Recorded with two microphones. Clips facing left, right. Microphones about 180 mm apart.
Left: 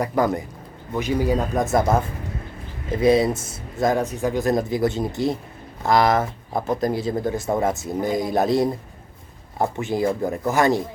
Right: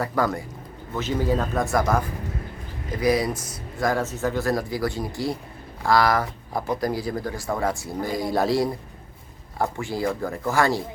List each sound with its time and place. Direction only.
0.0 s speech: 20° left (ahead or behind)